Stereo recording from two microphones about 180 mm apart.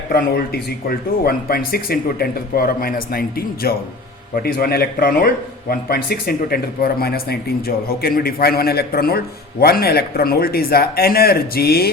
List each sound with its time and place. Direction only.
0.1 s a man's voice: 60° left (ahead or behind)